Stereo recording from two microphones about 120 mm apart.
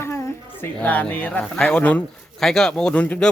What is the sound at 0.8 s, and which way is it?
A man's voice, 10° left (ahead or behind).